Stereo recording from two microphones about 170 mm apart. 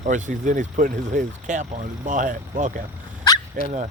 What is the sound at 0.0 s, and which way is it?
Speech, 45° right (ahead or behind).